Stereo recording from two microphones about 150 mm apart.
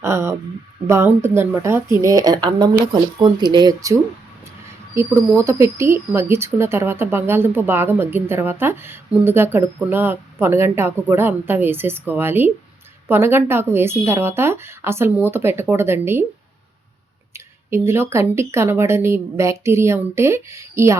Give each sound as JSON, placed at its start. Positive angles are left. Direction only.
{"t": 0.0, "sound": "speech", "side_deg": -20}
{"t": 4.9, "sound": "speech", "side_deg": -15}
{"t": 17.3, "sound": "speech", "side_deg": -15}